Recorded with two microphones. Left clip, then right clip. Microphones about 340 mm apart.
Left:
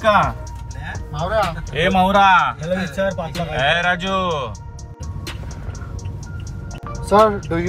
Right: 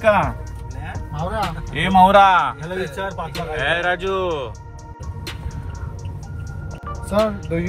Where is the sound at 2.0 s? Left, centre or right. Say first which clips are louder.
Right 3 dB; right.